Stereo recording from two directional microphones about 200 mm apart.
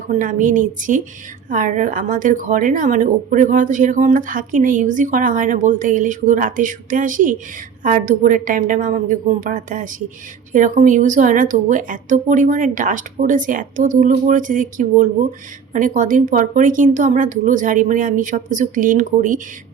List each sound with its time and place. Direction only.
0.2 s a woman's voice: 40° right (ahead or behind)